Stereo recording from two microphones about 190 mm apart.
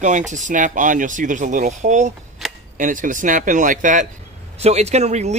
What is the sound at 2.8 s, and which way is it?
Speech, 45° right (ahead or behind).